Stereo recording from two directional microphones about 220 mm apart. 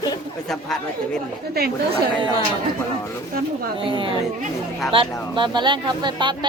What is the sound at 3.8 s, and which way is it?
A woman's voice, 25° right (ahead or behind).